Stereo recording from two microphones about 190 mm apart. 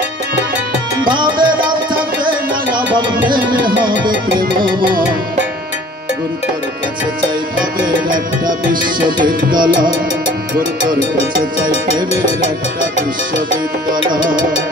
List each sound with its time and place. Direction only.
1.0 s music: 25° right (ahead or behind)
9.5 s music: 25° right (ahead or behind)